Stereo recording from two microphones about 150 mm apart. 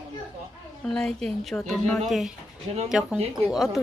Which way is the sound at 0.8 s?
5° left (ahead or behind).